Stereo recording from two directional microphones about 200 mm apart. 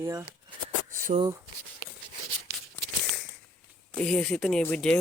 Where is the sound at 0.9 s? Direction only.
45° right (ahead or behind).